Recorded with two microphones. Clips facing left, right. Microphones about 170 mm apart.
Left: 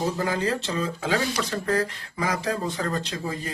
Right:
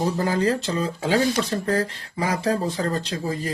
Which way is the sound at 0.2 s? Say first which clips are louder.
Right 4 dB; 40° right (ahead or behind).